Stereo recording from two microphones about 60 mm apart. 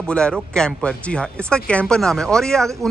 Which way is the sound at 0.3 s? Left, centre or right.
Centre.